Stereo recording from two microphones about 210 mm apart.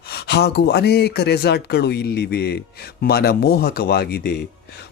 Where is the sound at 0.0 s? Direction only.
50° left (ahead or behind).